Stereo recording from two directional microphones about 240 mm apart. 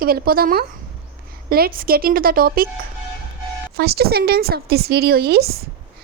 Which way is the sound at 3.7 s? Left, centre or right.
Right.